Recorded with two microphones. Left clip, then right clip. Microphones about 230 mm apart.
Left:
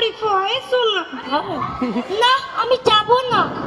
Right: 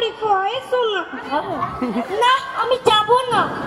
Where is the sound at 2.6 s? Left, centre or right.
Left.